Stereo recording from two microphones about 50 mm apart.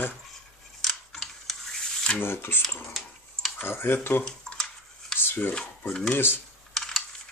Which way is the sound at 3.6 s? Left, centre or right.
Left.